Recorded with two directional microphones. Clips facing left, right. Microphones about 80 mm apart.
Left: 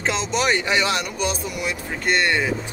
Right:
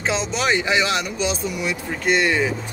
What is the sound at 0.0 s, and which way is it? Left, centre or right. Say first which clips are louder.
Speech: even; centre.